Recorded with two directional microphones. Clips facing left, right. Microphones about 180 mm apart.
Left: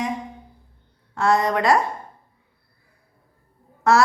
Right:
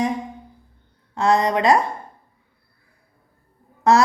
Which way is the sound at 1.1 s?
20° right (ahead or behind).